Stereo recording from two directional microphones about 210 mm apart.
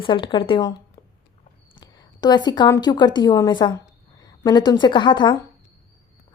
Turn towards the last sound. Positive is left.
turn(degrees=20)  # may be behind; listen again after turning